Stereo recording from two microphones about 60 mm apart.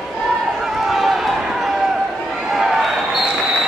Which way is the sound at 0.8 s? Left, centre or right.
Centre.